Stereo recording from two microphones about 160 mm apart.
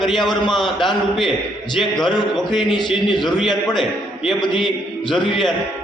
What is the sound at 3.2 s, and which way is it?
Speech, centre (ahead or behind).